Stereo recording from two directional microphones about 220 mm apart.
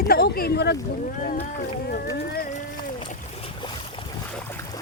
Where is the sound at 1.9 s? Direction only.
45° left (ahead or behind).